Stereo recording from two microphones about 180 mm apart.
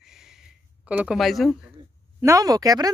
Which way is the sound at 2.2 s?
20° right (ahead or behind).